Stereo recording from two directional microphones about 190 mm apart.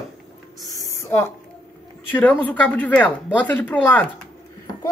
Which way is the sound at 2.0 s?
10° left (ahead or behind).